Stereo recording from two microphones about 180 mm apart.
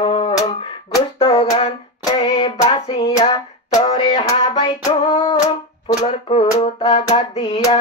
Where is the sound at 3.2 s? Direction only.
35° left (ahead or behind).